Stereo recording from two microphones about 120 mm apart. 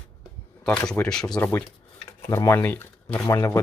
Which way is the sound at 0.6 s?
5° left (ahead or behind).